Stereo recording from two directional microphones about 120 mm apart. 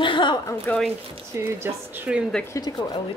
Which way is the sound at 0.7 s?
15° left (ahead or behind).